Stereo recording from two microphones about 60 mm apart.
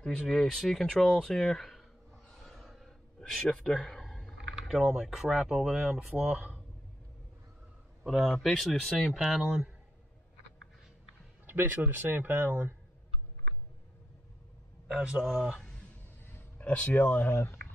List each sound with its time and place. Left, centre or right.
0.0 s speech: centre
2.2 s a sound: centre
4.6 s speech: centre
8.0 s speech: centre
11.4 s speech: right
15.1 s speech: centre
16.5 s speech: left